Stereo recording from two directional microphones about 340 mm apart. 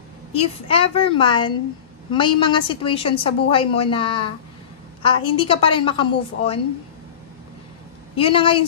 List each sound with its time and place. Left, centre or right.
0.3 s a woman's voice: centre
8.2 s a woman's voice: centre